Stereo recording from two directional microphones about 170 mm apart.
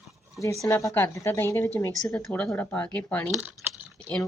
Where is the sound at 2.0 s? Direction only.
5° left (ahead or behind).